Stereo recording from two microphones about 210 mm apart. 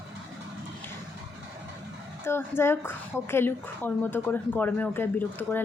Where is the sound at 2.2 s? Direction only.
10° left (ahead or behind).